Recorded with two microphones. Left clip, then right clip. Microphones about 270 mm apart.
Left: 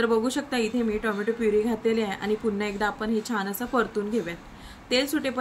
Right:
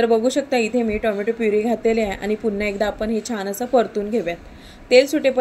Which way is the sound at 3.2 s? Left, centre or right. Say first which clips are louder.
Right 4 dB; left.